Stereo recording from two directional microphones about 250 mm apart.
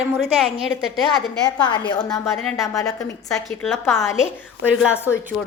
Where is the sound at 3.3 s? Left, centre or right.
Centre.